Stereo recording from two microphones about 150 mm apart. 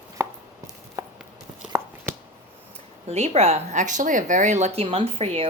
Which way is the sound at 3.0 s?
45° right (ahead or behind).